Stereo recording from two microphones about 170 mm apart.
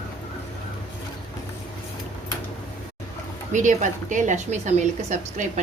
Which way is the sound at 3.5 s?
45° right (ahead or behind).